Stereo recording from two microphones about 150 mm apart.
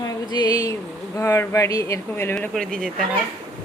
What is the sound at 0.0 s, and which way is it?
Speech, 25° left (ahead or behind).